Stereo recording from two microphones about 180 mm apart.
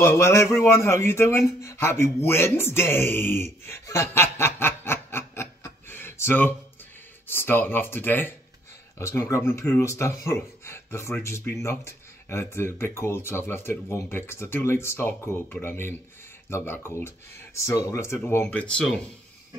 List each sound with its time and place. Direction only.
0.0 s speech: 15° left (ahead or behind)
3.6 s snicker: 15° left (ahead or behind)
7.2 s speech: 10° left (ahead or behind)